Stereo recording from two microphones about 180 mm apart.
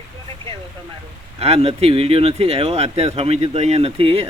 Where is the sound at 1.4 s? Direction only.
35° right (ahead or behind).